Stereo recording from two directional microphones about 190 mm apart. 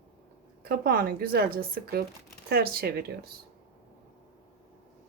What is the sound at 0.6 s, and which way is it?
Speech, 50° right (ahead or behind).